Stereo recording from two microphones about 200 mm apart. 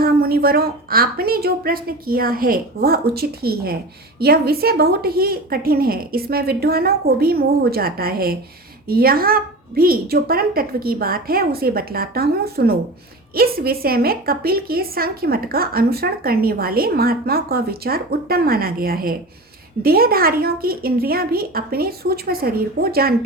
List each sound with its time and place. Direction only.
0.0 s a woman's voice: 50° right (ahead or behind)